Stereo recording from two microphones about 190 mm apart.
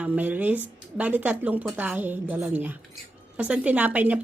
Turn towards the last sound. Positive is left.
turn(degrees=-10)  # may be behind; listen again after turning